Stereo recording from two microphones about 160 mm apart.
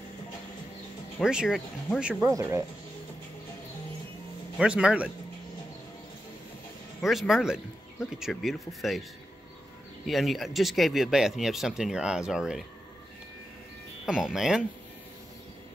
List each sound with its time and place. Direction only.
1.2 s speech: 5° right (ahead or behind)
2.2 s speech: 15° right (ahead or behind)
4.6 s speech: 5° right (ahead or behind)
7.0 s speech: centre (ahead or behind)
10.0 s speech: centre (ahead or behind)
14.0 s speech: 5° right (ahead or behind)